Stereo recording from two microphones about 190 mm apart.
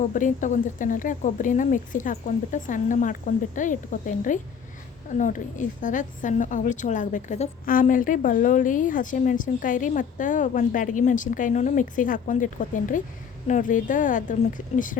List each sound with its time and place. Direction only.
0.1 s a woman's voice: 40° left (ahead or behind)